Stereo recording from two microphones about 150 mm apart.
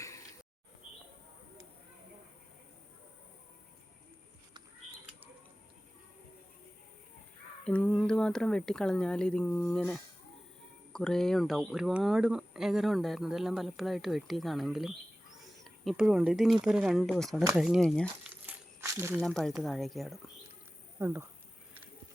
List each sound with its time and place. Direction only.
7.6 s speech: 10° left (ahead or behind)
18.2 s crumpling: 15° right (ahead or behind)
19.2 s speech: 5° left (ahead or behind)
21.0 s speech: 15° right (ahead or behind)